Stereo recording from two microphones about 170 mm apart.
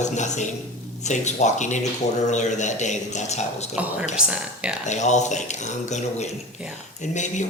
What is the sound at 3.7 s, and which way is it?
Speech, 10° right (ahead or behind).